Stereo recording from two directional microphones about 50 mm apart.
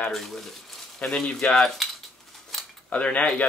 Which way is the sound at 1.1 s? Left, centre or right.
Centre.